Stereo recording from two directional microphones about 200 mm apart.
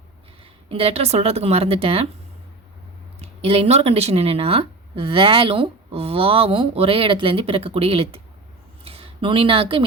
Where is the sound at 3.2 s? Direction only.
30° right (ahead or behind).